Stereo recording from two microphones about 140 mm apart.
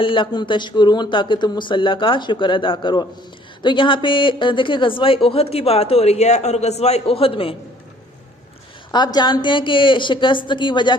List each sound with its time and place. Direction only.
0.0 s speech: 40° left (ahead or behind)
8.9 s speech: 30° left (ahead or behind)